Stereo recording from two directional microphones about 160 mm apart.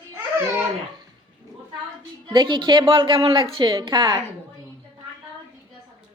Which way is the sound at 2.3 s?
30° right (ahead or behind).